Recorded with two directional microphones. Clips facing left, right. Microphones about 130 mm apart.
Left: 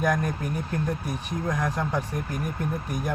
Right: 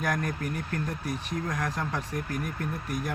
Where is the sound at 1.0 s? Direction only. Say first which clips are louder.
Left 2 dB; 15° left (ahead or behind).